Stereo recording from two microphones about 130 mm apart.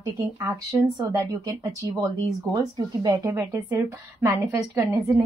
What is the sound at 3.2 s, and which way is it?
A woman's voice, 20° right (ahead or behind).